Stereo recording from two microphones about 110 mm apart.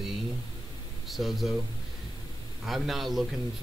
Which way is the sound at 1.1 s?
Centre (ahead or behind).